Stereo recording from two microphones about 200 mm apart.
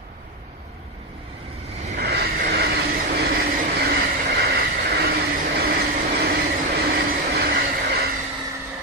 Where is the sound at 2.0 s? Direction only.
55° right (ahead or behind).